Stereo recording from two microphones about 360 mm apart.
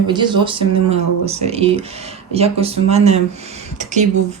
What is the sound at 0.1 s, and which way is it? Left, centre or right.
Speech, centre.